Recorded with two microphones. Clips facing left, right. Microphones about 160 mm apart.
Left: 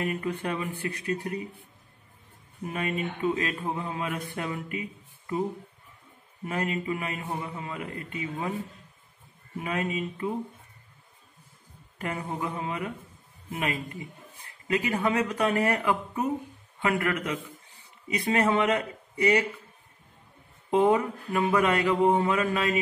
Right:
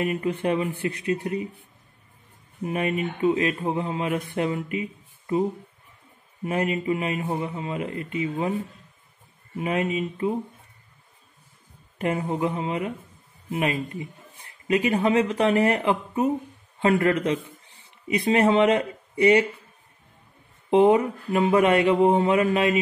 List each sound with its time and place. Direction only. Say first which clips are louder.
0.0 s a man's voice: right 5 dB; 20° right (ahead or behind)
2.7 s a man's voice: right 5 dB; 20° right (ahead or behind)
6.4 s a man's voice: right 5 dB; 20° right (ahead or behind)
9.6 s a man's voice: right 5 dB; 20° right (ahead or behind)
12.0 s a man's voice: right 7 dB; 20° right (ahead or behind)
20.7 s a man's voice: right 5 dB; 20° right (ahead or behind)